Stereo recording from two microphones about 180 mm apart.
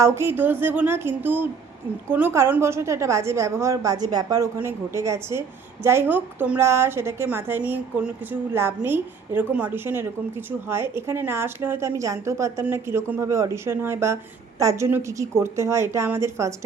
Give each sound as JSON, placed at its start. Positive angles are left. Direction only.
{"t": 0.0, "sound": "a woman's voice", "side_deg": -15}